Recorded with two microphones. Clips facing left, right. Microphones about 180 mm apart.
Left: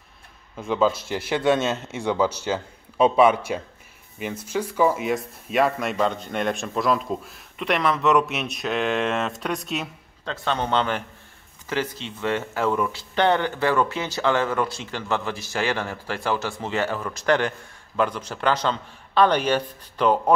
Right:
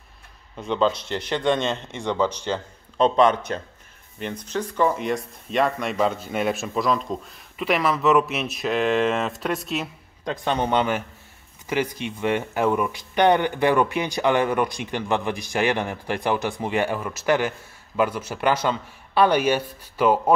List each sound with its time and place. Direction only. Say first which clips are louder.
0.6 s speech: left 1 dB; 5° left (ahead or behind)
10.2 s speech: right 2 dB; 15° right (ahead or behind)